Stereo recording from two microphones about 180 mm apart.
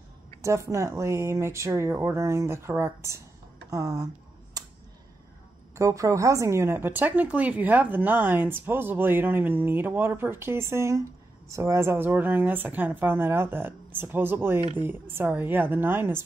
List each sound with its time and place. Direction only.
0.4 s speech: 15° right (ahead or behind)
5.8 s speech: 20° right (ahead or behind)